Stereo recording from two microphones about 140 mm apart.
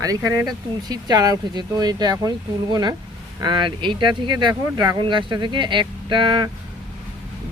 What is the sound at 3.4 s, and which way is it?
Speech, 35° right (ahead or behind).